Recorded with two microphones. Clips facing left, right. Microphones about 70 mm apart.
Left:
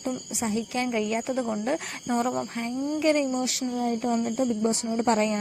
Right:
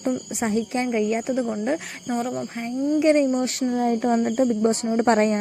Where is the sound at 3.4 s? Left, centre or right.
Right.